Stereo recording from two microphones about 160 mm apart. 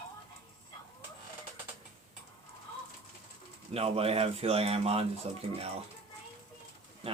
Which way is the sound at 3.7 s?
40° right (ahead or behind).